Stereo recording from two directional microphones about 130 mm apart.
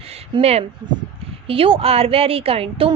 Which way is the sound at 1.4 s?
45° right (ahead or behind).